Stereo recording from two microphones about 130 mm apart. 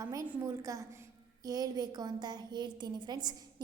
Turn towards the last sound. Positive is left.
turn(degrees=-30)  # may be behind; listen again after turning